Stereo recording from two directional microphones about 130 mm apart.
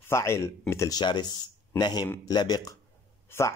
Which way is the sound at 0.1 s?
20° left (ahead or behind).